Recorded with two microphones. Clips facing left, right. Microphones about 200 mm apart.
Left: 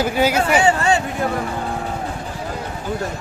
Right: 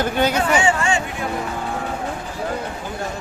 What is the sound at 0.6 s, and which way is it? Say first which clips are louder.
Hubbub: left 3 dB; 35° left (ahead or behind).